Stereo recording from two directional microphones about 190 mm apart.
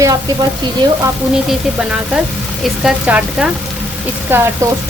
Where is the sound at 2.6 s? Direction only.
5° right (ahead or behind).